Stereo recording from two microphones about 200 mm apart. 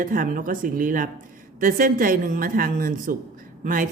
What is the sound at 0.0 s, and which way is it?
Speech, 45° right (ahead or behind).